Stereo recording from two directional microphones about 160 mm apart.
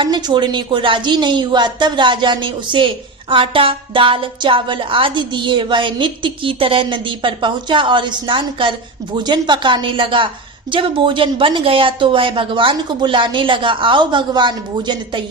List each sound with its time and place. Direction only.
0.0 s a woman's voice: 25° right (ahead or behind)